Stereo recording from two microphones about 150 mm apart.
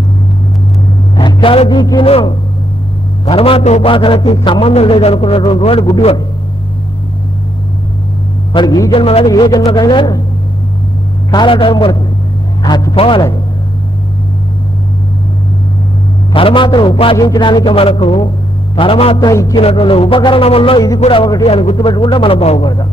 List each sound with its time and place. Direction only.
1.1 s a man's voice: 35° left (ahead or behind)
8.5 s speech: 25° left (ahead or behind)
8.9 s a man's voice: 40° left (ahead or behind)
9.3 s speech: 25° left (ahead or behind)
11.2 s a man's voice: 30° left (ahead or behind)
16.3 s a man's voice: 35° left (ahead or behind)
19.1 s speech: 20° left (ahead or behind)
19.5 s a man's voice: 35° left (ahead or behind)
21.7 s a man's voice: 30° left (ahead or behind)